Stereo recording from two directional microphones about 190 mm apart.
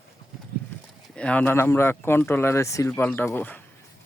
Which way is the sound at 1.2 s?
5° left (ahead or behind).